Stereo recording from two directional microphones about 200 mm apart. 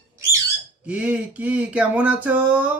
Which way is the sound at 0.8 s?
5° right (ahead or behind).